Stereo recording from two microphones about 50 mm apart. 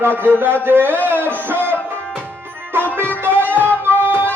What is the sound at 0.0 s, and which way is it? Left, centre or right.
Speech, right.